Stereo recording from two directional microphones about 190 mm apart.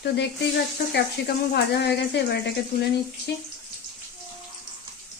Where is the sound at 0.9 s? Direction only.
60° left (ahead or behind).